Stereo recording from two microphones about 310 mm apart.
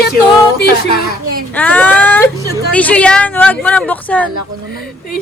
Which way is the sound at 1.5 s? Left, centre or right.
Centre.